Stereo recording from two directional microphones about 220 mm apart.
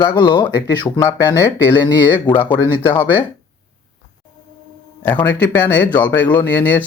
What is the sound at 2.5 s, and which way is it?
Speech, 10° left (ahead or behind).